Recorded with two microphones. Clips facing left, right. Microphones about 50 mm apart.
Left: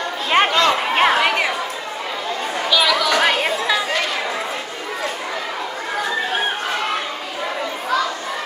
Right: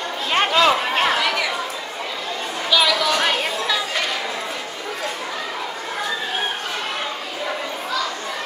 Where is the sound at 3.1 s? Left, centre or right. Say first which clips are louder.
Left 3 dB; left.